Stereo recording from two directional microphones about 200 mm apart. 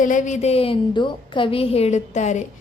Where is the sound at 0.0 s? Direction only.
40° left (ahead or behind).